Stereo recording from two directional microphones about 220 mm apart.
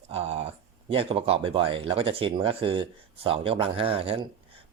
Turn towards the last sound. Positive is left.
turn(degrees=-25)  # may be behind; listen again after turning